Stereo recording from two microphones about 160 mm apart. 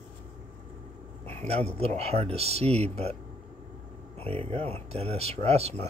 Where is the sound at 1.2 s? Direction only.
45° right (ahead or behind).